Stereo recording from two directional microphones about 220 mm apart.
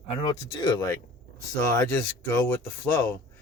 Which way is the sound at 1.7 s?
10° left (ahead or behind).